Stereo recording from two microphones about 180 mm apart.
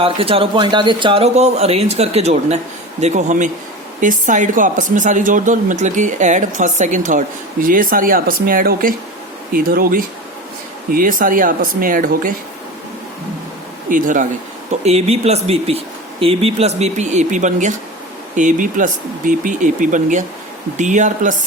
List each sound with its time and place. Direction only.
0.0 s a man's voice: 30° right (ahead or behind); by 12.3 s 50° right (ahead or behind)
13.9 s speech: 45° right (ahead or behind)
14.7 s a man's voice: 35° right (ahead or behind)